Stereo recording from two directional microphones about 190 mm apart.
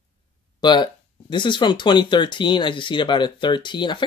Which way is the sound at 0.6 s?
25° left (ahead or behind).